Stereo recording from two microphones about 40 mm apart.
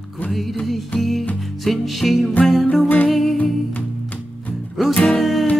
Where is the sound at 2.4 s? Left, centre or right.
Left.